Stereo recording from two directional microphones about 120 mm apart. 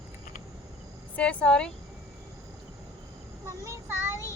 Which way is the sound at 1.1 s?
10° left (ahead or behind).